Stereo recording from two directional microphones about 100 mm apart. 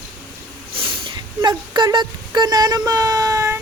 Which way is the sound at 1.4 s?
45° right (ahead or behind).